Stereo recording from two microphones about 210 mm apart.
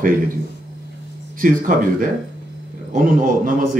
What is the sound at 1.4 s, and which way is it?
Speech, 40° right (ahead or behind).